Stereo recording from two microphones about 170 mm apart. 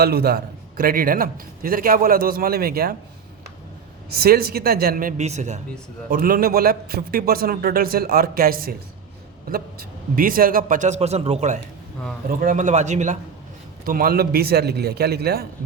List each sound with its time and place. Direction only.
0.0 s a man's voice: 65° right (ahead or behind)
4.2 s a man's voice: 60° right (ahead or behind); by 5.5 s 45° right (ahead or behind)
6.1 s a man's voice: 55° right (ahead or behind)
10.2 s speech: 55° right (ahead or behind); by 11.6 s 40° right (ahead or behind)
12.3 s speech: 55° right (ahead or behind)
13.8 s a man's voice: 55° right (ahead or behind)